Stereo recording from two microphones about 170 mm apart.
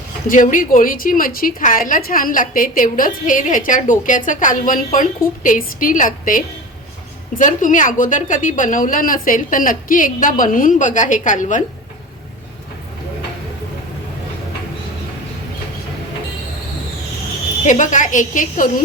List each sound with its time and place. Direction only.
0.3 s a woman's voice: 50° left (ahead or behind)
17.7 s a woman's voice: 45° left (ahead or behind)